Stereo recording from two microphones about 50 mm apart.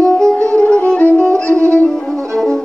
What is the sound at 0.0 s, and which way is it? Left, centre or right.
Music, centre.